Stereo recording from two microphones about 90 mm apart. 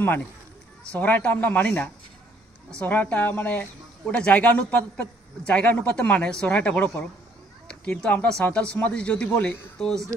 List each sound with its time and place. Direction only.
0.9 s a man's voice: 20° left (ahead or behind)